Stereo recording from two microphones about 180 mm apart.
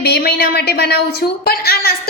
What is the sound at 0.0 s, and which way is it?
A woman's voice, 60° left (ahead or behind).